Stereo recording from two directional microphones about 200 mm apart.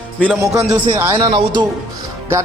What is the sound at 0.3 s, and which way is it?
A man's voice, 15° right (ahead or behind).